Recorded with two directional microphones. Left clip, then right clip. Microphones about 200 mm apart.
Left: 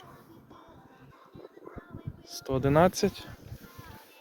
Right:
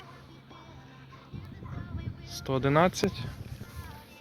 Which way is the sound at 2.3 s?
15° left (ahead or behind).